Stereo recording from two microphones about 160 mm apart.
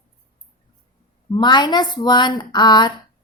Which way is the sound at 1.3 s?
25° left (ahead or behind).